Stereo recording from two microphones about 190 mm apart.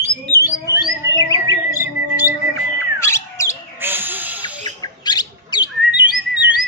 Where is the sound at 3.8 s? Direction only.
10° right (ahead or behind).